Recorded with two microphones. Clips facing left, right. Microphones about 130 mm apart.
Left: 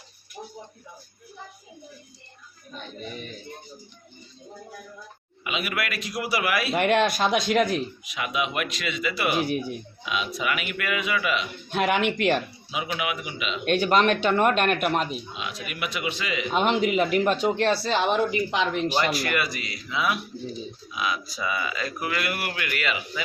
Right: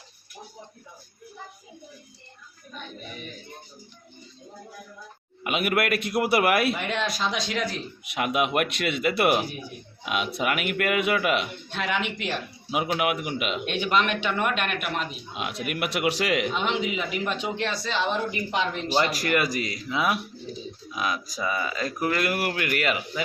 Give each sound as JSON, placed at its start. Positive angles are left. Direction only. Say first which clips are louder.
{"t": 5.4, "sound": "a man's voice", "louder": "right 5 dB", "side_deg": -55}
{"t": 6.7, "sound": "speech", "louder": "left 7 dB", "side_deg": 60}
{"t": 8.0, "sound": "a man's voice", "louder": "right 3 dB", "side_deg": -60}
{"t": 11.7, "sound": "speech", "louder": "left 6 dB", "side_deg": 55}
{"t": 13.0, "sound": "a man's voice", "louder": "right 4 dB", "side_deg": -55}
{"t": 13.7, "sound": "speech", "louder": "left 6 dB", "side_deg": 45}
{"t": 15.4, "sound": "a man's voice", "louder": "right 9 dB", "side_deg": -60}
{"t": 16.5, "sound": "speech", "louder": "left 4 dB", "side_deg": 50}
{"t": 18.0, "sound": "a woman's voice", "louder": "left 4 dB", "side_deg": 70}
{"t": 19.1, "sound": "a man's voice", "louder": "right 2 dB", "side_deg": -45}